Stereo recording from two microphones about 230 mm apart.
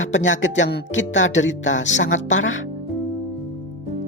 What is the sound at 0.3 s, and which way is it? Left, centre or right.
Speech, left.